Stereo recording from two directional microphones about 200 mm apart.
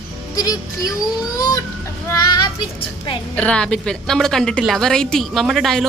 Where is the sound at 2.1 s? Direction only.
20° left (ahead or behind).